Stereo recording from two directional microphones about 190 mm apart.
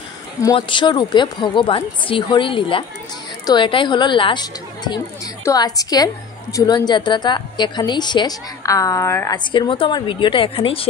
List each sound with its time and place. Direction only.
0.4 s a woman's voice: 20° left (ahead or behind)
9.4 s a woman's voice: 25° left (ahead or behind)